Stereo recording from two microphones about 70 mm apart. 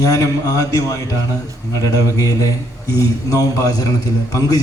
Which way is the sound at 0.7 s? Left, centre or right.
Left.